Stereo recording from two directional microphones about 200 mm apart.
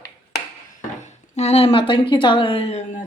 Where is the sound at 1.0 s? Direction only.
35° left (ahead or behind).